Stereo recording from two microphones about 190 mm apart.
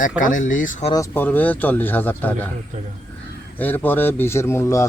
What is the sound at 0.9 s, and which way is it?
A man's voice, 15° left (ahead or behind).